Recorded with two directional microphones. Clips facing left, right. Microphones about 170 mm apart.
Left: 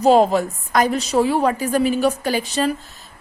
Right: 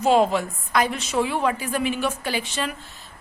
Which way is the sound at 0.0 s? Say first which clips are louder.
Left 5 dB; 40° left (ahead or behind).